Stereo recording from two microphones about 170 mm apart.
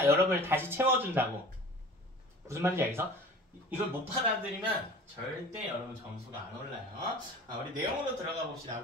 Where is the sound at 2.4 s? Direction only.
15° right (ahead or behind).